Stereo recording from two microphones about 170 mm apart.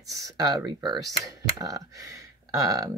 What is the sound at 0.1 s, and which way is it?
Speech, 20° right (ahead or behind).